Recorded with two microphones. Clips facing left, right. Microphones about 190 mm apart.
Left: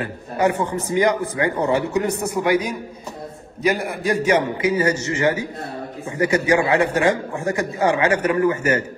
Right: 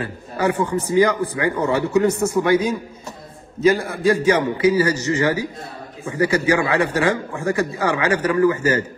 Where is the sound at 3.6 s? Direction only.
15° left (ahead or behind).